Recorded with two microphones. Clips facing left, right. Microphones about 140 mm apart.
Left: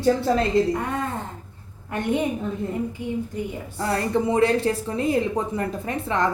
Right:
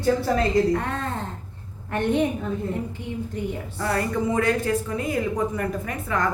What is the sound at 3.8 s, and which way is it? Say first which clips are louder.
Speech: left 2 dB; 30° left (ahead or behind).